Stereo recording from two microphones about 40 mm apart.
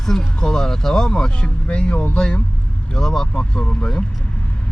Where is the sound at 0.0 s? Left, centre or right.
Centre.